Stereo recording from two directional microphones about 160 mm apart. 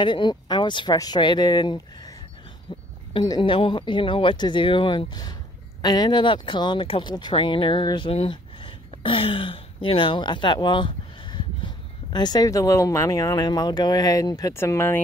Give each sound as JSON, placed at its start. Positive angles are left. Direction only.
{"t": 0.0, "sound": "speech", "side_deg": 30}